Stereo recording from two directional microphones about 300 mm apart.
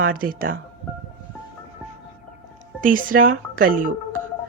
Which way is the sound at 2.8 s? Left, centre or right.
Right.